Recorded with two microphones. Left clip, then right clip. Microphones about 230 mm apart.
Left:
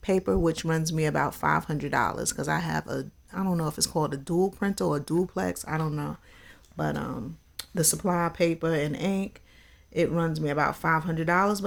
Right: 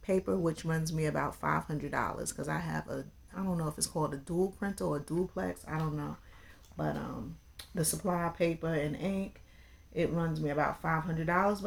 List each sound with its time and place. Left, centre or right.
0.0 s speech: left